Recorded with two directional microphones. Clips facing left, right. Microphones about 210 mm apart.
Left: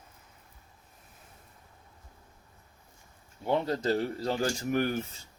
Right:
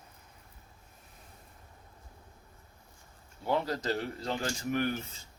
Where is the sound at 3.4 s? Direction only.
25° left (ahead or behind); by 4.9 s 40° left (ahead or behind).